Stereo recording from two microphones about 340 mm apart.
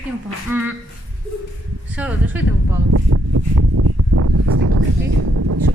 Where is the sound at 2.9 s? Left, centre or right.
Right.